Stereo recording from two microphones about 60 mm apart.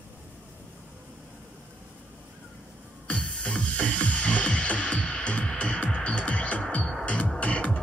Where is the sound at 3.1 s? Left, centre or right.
Centre.